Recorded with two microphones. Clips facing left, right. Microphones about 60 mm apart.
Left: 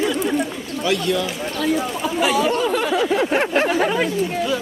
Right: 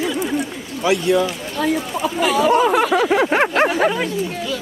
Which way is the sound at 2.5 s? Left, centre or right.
Right.